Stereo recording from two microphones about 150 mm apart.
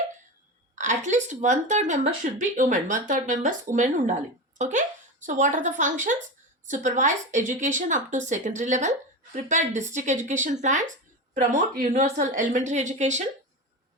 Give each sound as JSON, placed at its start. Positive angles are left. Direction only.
{"t": 0.8, "sound": "a woman's voice", "side_deg": -55}